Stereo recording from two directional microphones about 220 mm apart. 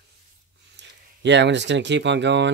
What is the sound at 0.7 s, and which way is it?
Speech, 55° right (ahead or behind).